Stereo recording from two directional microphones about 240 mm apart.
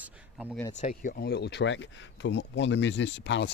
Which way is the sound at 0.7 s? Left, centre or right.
Left.